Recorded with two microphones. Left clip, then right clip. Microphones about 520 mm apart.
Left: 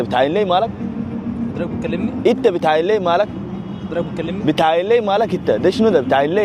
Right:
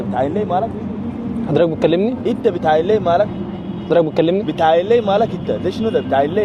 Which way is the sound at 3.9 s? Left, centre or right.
Right.